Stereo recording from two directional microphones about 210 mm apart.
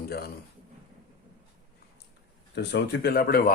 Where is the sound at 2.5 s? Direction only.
50° left (ahead or behind).